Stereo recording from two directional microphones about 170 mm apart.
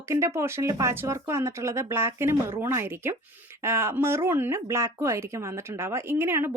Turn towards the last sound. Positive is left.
turn(degrees=-15)  # may be behind; listen again after turning